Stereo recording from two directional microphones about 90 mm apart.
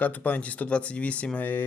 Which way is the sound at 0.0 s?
15° left (ahead or behind).